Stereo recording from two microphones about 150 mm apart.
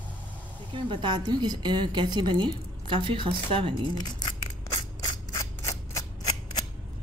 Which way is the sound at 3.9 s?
25° left (ahead or behind).